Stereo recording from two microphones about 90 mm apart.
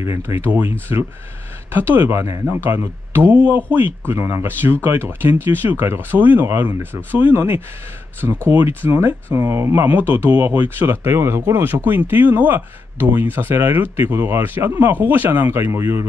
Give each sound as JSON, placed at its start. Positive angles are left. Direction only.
{"t": 0.0, "sound": "speech", "side_deg": -30}